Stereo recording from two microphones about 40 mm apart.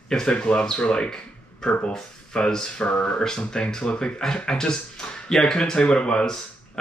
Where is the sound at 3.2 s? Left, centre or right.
Centre.